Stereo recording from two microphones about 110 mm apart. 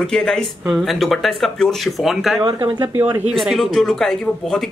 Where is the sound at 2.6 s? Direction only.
20° right (ahead or behind).